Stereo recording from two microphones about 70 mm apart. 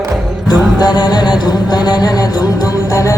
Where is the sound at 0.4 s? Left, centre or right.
Left.